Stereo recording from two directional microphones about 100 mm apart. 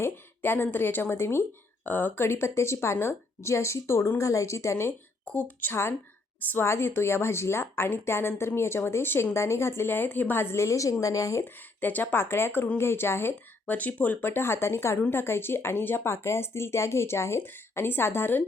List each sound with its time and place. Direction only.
0.0 s a woman's voice: 20° left (ahead or behind)
5.2 s a woman's voice: 15° left (ahead or behind); by 11.4 s 30° left (ahead or behind)
11.8 s a woman's voice: 20° left (ahead or behind)